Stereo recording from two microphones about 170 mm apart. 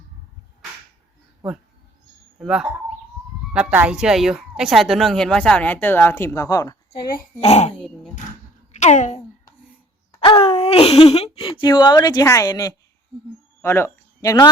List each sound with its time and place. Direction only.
2.4 s speech: 5° right (ahead or behind); by 7.1 s 20° left (ahead or behind)
7.4 s speech: 40° left (ahead or behind)
7.8 s a sound: 5° left (ahead or behind)
8.7 s speech: 45° left (ahead or behind)
10.2 s a sound: 35° left (ahead or behind)
13.6 s speech: 15° left (ahead or behind)